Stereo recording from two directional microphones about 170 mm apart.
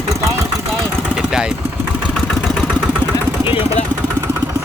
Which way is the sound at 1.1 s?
5° right (ahead or behind).